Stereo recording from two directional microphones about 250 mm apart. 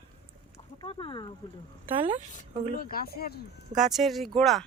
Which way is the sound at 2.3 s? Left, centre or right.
Left.